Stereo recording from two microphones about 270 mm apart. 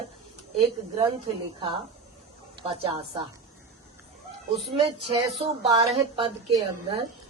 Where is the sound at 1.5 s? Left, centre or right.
Centre.